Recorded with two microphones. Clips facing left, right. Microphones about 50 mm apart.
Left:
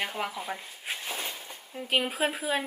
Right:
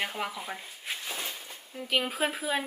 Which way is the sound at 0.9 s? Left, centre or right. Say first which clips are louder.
Left 1 dB; centre.